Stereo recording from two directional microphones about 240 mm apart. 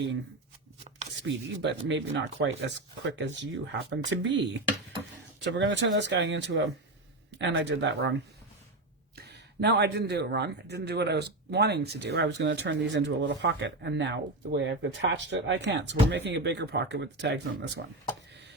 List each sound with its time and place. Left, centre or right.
1.2 s speech: right
9.1 s speech: right